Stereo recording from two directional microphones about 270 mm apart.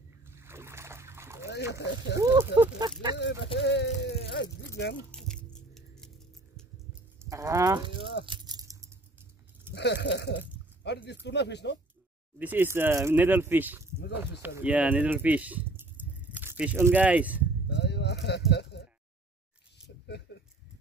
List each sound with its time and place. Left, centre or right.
0.4 s splash: centre
1.7 s speech: left
2.1 s speech: centre
3.5 s speech: left
5.1 s biting: centre
7.2 s speech: centre
8.0 s speech: left
8.3 s a sound: centre
9.8 s speech: left
10.8 s a sound: left
11.2 s speech: left
12.4 s speech: centre
17.6 s sheep: left